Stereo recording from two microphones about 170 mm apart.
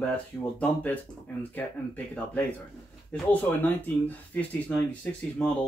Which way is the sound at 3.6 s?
10° left (ahead or behind).